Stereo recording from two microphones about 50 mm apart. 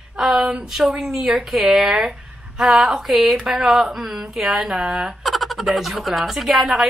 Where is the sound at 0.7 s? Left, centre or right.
Centre.